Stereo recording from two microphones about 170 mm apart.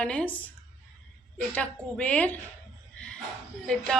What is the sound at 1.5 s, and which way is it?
Speech, 10° left (ahead or behind).